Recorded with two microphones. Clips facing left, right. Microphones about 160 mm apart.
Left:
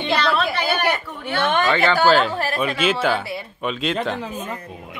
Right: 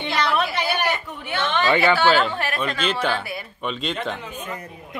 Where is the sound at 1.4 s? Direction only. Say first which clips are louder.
Left 3 dB; 50° left (ahead or behind).